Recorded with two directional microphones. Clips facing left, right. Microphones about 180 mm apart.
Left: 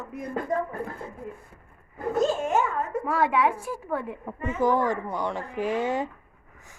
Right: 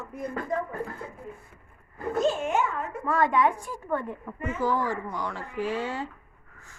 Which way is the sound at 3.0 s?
5° left (ahead or behind).